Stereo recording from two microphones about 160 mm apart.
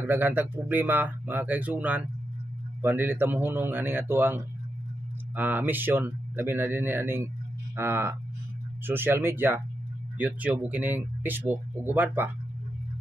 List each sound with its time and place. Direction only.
0.0 s speech: 15° right (ahead or behind)